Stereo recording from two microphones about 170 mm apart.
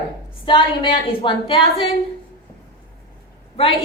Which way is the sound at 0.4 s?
30° left (ahead or behind).